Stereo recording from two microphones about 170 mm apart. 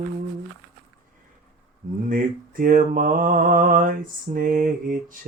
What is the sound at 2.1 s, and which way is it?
Mantra, 55° right (ahead or behind).